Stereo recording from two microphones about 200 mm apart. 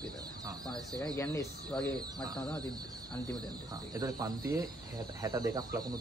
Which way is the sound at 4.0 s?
20° right (ahead or behind).